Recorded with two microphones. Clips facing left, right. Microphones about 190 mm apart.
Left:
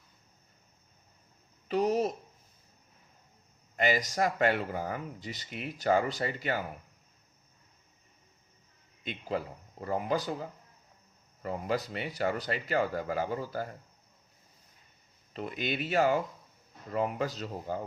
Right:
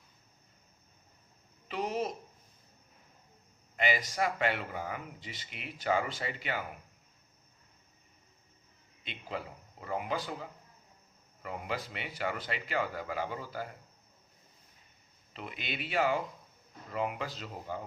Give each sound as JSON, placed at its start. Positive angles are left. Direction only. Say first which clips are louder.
{"t": 1.6, "sound": "speech", "louder": "left 6 dB", "side_deg": 40}
{"t": 3.8, "sound": "speech", "louder": "left 3 dB", "side_deg": 40}
{"t": 9.8, "sound": "speech", "louder": "left 4 dB", "side_deg": 40}
{"t": 15.3, "sound": "speech", "louder": "left 7 dB", "side_deg": 45}